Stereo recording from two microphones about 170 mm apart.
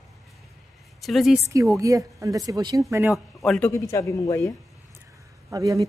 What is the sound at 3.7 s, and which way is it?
Speech, 15° left (ahead or behind).